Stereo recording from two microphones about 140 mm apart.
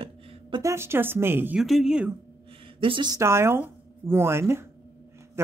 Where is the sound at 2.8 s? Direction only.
35° right (ahead or behind).